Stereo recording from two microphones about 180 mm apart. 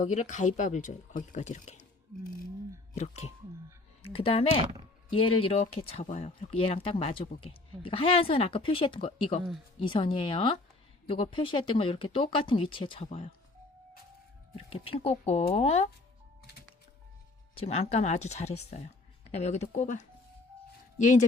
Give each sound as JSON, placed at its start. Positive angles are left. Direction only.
{"t": 0.0, "sound": "speech", "side_deg": 40}
{"t": 2.9, "sound": "speech", "side_deg": 35}
{"t": 14.5, "sound": "speech", "side_deg": 30}
{"t": 17.5, "sound": "speech", "side_deg": 35}